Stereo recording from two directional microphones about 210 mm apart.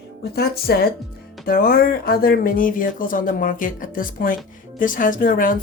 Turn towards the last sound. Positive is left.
turn(degrees=40)  # may be behind; listen again after turning